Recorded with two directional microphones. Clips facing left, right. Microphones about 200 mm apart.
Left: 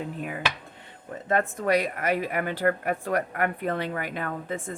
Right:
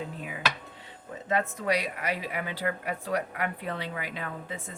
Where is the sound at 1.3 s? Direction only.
50° left (ahead or behind).